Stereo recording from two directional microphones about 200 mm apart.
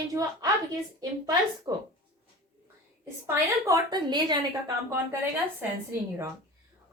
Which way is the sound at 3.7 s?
20° right (ahead or behind).